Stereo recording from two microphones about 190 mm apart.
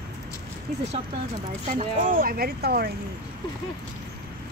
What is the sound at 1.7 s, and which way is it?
Speech, 40° right (ahead or behind).